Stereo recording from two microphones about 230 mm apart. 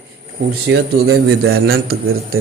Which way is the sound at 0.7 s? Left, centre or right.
Right.